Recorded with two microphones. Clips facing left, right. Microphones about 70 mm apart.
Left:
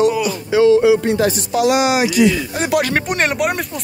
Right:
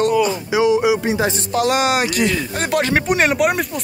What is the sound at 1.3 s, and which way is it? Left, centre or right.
Speech, right.